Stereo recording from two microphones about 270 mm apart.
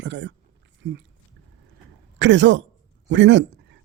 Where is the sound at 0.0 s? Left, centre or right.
Right.